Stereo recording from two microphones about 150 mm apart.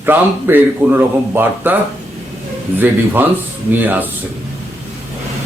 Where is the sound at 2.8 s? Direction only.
15° right (ahead or behind).